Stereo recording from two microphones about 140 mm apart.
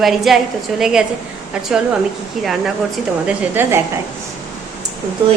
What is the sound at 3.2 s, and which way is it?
Speech, 15° right (ahead or behind).